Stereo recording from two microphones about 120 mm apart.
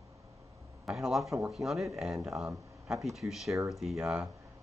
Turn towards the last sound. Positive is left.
turn(degrees=-5)  # may be behind; listen again after turning